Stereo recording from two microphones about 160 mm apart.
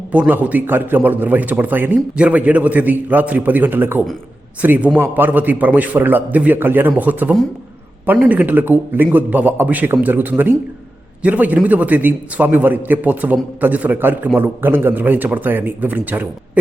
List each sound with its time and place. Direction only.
0.1 s a man's voice: 10° right (ahead or behind)